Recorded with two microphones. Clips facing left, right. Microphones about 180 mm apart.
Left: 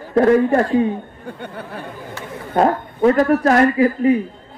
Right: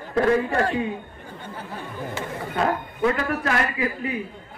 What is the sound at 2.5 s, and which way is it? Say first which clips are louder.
A man's voice: left 8 dB; 40° left (ahead or behind).